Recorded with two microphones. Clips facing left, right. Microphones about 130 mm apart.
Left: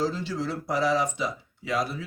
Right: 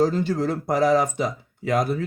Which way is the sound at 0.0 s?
50° right (ahead or behind).